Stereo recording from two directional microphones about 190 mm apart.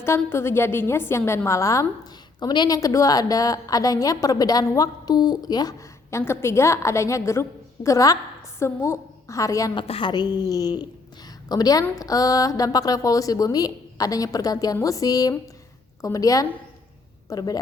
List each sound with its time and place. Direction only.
0.0 s a woman's voice: 15° left (ahead or behind)
9.8 s a woman's voice: 30° left (ahead or behind)